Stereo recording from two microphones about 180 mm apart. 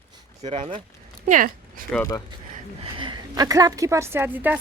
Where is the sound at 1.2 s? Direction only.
45° right (ahead or behind).